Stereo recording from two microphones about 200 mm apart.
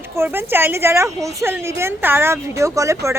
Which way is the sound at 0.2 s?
10° right (ahead or behind).